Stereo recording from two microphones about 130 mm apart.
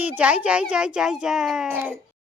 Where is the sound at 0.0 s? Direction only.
10° right (ahead or behind).